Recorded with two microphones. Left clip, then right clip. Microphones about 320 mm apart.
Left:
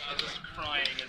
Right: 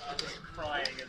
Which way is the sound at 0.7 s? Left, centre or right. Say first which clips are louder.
Left 3 dB; right.